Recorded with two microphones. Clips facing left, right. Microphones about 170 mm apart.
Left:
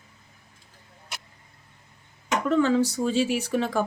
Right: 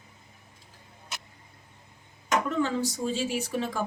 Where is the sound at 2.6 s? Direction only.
75° left (ahead or behind).